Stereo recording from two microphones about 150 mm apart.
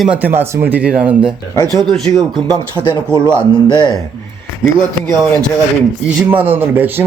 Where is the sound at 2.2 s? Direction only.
25° right (ahead or behind).